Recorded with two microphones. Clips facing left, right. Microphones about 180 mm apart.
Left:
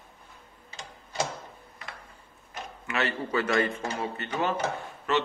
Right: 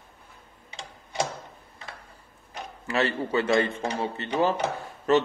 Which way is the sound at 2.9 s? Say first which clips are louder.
Right 4 dB; 30° right (ahead or behind).